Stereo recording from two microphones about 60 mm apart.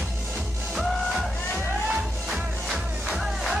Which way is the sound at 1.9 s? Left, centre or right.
Centre.